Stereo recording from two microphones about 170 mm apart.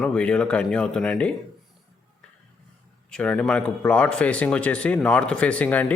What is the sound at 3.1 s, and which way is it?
Speech, 5° left (ahead or behind).